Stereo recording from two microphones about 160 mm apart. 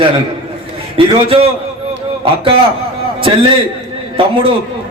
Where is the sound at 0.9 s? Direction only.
35° right (ahead or behind).